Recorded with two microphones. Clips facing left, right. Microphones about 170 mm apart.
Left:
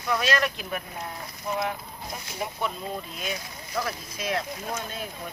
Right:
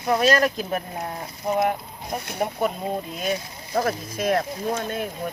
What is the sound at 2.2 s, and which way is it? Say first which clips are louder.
Speech: right 7 dB; 55° right (ahead or behind).